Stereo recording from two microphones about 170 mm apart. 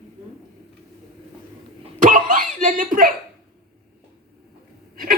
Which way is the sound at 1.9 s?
50° right (ahead or behind).